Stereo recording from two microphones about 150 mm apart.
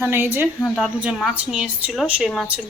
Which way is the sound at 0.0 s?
15° right (ahead or behind).